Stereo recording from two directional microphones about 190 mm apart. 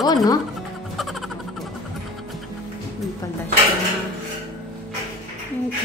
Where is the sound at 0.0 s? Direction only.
20° left (ahead or behind).